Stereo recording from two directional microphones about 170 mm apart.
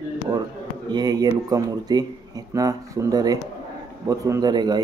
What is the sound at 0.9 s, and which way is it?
Speech, 25° right (ahead or behind).